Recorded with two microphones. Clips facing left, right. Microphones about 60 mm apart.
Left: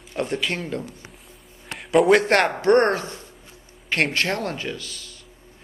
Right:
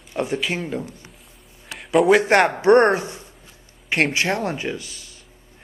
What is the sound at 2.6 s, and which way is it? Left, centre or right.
Speech, centre.